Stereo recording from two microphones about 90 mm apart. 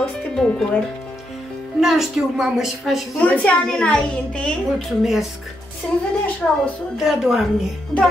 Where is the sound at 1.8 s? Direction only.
5° right (ahead or behind).